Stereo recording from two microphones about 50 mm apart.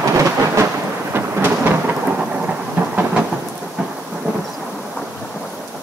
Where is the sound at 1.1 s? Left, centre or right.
Right.